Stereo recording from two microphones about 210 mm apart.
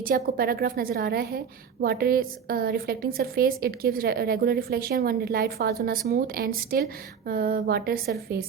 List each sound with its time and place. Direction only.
0.0 s a woman's voice: 45° right (ahead or behind)